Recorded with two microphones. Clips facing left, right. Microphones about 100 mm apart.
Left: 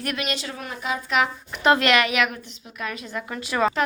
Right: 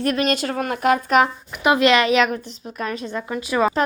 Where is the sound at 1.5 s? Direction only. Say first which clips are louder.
Right 1 dB; 15° right (ahead or behind); by 3.2 s 30° right (ahead or behind).